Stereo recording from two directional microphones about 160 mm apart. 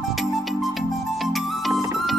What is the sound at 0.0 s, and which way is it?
Music, centre (ahead or behind).